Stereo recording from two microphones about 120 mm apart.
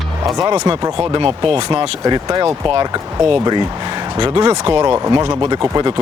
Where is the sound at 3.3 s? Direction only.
40° right (ahead or behind).